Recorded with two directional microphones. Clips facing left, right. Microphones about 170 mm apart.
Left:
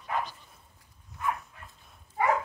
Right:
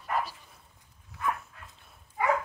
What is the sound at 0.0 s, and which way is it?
Dog, 5° right (ahead or behind).